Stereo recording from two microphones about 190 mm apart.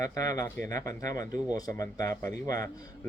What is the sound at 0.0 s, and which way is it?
Speech, 20° left (ahead or behind).